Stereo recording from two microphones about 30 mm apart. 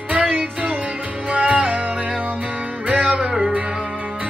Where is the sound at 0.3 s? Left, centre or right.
Right.